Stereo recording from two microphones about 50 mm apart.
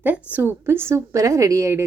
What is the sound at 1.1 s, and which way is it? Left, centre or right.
Speech, right.